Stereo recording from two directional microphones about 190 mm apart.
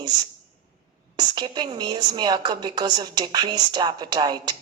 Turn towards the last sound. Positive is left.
turn(degrees=-20)  # may be behind; listen again after turning